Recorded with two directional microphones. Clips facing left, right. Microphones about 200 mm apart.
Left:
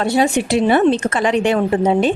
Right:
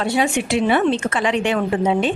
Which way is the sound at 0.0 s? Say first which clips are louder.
Left 4 dB; 40° left (ahead or behind).